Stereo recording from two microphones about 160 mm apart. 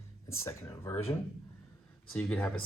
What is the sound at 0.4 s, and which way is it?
Speech, 15° left (ahead or behind).